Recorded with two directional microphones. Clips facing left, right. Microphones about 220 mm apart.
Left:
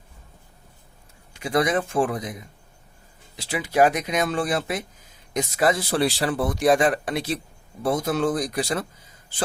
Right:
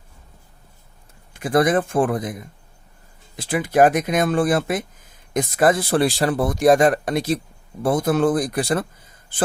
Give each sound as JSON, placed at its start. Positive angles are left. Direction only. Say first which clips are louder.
{"t": 1.3, "sound": "speech", "louder": "right 4 dB", "side_deg": -50}